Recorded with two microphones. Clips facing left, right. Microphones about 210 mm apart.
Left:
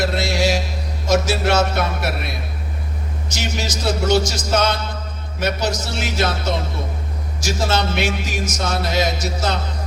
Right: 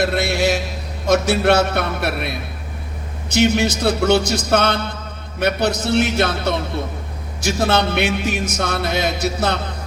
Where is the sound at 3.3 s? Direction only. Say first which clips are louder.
Right 11 dB; 60° right (ahead or behind).